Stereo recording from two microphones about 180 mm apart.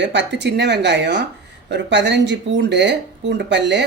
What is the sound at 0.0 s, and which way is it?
Speech, 80° right.